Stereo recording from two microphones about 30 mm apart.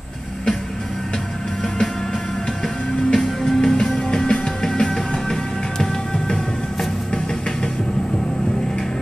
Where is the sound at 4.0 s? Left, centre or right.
Left.